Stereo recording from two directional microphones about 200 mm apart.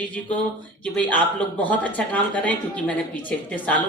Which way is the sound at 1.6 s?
10° left (ahead or behind).